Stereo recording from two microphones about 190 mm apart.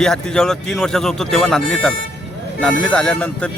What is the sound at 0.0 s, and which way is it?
Speech, 5° left (ahead or behind).